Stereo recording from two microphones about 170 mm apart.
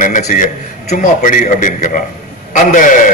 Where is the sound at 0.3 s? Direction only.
45° left (ahead or behind).